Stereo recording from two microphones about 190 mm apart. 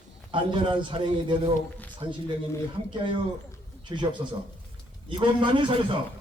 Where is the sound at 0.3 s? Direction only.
25° right (ahead or behind).